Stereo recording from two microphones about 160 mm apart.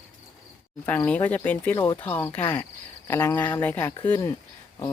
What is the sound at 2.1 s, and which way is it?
Speech, 15° left (ahead or behind).